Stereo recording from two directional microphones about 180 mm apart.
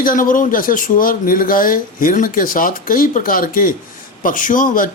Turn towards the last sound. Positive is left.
turn(degrees=50)  # may be behind; listen again after turning